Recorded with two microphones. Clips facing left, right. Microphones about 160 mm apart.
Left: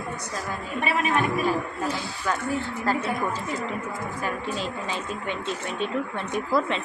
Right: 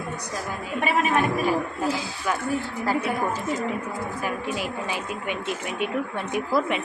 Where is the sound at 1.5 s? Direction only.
10° right (ahead or behind).